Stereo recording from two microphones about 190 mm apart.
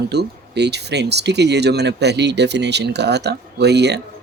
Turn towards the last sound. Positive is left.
turn(degrees=-60)  # may be behind; listen again after turning